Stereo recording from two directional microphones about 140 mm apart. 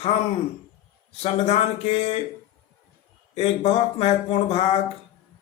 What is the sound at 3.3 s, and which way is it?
Speech, 45° left (ahead or behind).